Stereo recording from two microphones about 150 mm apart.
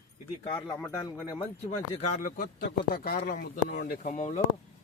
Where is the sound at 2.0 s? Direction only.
55° left (ahead or behind).